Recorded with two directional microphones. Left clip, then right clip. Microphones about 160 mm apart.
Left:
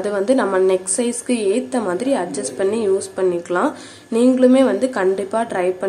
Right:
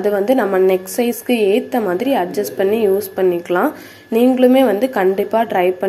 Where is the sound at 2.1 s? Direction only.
15° right (ahead or behind).